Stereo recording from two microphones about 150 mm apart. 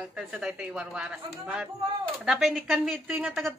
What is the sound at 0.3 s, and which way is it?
A woman's voice, 5° right (ahead or behind).